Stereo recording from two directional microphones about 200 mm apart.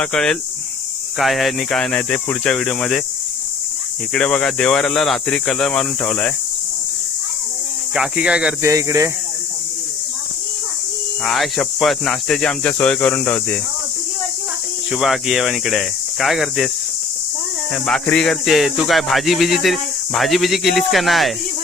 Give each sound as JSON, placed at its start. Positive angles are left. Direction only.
{"t": 0.0, "sound": "speech", "side_deg": 5}
{"t": 4.1, "sound": "speech", "side_deg": 5}
{"t": 7.9, "sound": "speech", "side_deg": -5}
{"t": 8.7, "sound": "speech", "side_deg": -15}
{"t": 11.2, "sound": "speech", "side_deg": 0}
{"t": 14.9, "sound": "speech", "side_deg": 0}
{"t": 17.8, "sound": "speech", "side_deg": 5}